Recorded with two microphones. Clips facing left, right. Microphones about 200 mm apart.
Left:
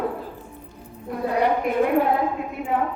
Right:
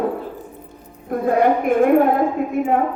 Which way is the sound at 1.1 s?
50° right (ahead or behind).